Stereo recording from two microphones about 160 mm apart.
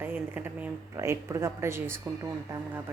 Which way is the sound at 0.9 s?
20° right (ahead or behind).